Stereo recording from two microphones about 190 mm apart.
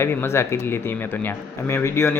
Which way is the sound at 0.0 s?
10° left (ahead or behind).